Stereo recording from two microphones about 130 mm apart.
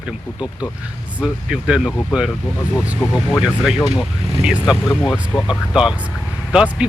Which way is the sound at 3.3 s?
5° right (ahead or behind).